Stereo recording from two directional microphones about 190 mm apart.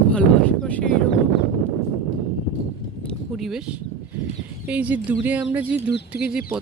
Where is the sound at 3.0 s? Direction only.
Centre (ahead or behind).